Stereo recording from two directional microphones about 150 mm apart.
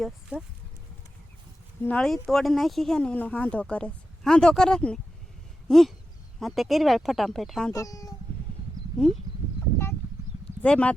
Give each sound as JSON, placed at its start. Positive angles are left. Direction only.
{"t": 0.0, "sound": "speech", "side_deg": -5}
{"t": 1.8, "sound": "speech", "side_deg": 5}
{"t": 5.6, "sound": "a sound", "side_deg": 0}
{"t": 6.4, "sound": "speech", "side_deg": 0}
{"t": 7.7, "sound": "speech", "side_deg": 20}
{"t": 9.0, "sound": "speech", "side_deg": 0}
{"t": 10.4, "sound": "a sound", "side_deg": 5}